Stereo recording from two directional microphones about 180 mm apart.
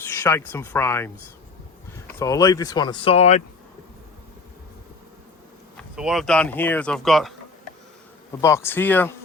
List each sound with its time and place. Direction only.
0.0 s speech: 10° left (ahead or behind); by 3.4 s 35° left (ahead or behind)
5.7 s speech: centre (ahead or behind)
8.4 s speech: 15° left (ahead or behind)